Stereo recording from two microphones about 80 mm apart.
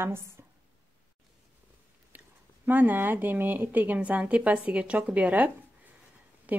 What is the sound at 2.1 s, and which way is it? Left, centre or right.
Speech, right.